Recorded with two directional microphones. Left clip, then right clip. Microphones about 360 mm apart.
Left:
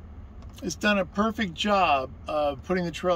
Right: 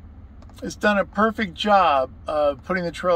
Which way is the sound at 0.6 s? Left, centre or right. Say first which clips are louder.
Right 4 dB; centre.